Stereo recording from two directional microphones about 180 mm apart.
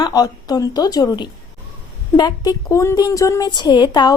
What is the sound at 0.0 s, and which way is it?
A woman's voice, 20° left (ahead or behind).